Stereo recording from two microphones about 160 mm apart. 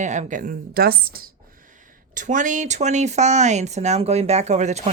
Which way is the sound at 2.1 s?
50° right (ahead or behind).